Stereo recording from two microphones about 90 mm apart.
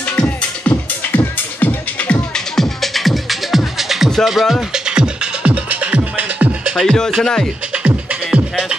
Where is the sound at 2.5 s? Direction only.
5° left (ahead or behind); by 6.7 s 15° right (ahead or behind).